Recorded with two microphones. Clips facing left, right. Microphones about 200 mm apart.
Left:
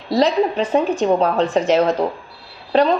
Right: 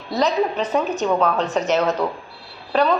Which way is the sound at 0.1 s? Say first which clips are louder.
Left 4 dB; 30° left (ahead or behind).